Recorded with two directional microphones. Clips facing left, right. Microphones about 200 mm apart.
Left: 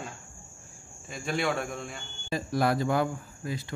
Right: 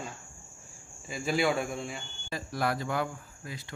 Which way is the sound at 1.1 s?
5° right (ahead or behind).